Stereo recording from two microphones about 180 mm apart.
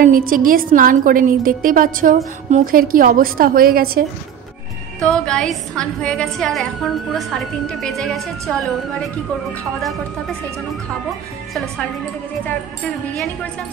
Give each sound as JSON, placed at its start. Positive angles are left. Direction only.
{"t": 0.0, "sound": "a woman's voice", "side_deg": -50}
{"t": 5.0, "sound": "a woman's voice", "side_deg": 5}
{"t": 12.4, "sound": "speech", "side_deg": 5}